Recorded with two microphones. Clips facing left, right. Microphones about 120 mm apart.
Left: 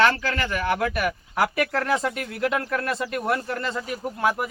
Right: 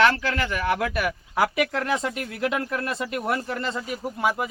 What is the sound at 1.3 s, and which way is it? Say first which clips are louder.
Speech: right 1 dB; 20° right (ahead or behind).